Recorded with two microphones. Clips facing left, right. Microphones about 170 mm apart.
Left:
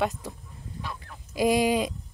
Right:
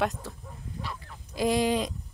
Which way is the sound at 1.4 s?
10° left (ahead or behind).